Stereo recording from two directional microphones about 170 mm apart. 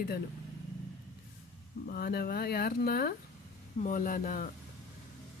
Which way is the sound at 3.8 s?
50° left (ahead or behind).